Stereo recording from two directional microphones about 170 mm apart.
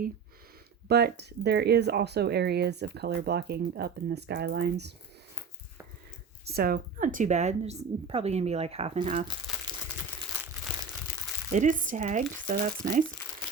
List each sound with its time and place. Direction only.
0.9 s speech: 70° right (ahead or behind)
6.4 s a woman's voice: 65° right (ahead or behind); by 9.1 s 35° right (ahead or behind)
11.5 s speech: 50° right (ahead or behind)